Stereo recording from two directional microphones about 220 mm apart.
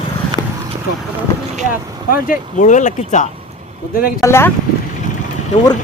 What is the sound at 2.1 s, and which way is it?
Speech, 35° left (ahead or behind).